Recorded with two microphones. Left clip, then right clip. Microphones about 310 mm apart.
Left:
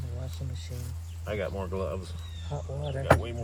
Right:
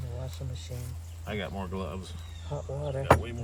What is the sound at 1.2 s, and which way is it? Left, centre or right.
Speech, centre.